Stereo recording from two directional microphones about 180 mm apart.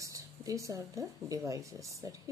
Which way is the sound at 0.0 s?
20° right (ahead or behind).